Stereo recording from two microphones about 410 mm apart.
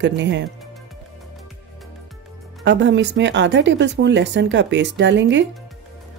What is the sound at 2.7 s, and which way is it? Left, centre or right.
A woman's voice, right.